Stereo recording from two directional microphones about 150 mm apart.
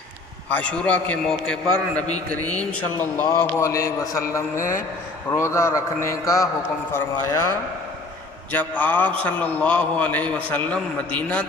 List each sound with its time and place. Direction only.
0.5 s a man's voice: 10° left (ahead or behind)
3.0 s a man's voice: 15° left (ahead or behind)
8.5 s a man's voice: 10° left (ahead or behind)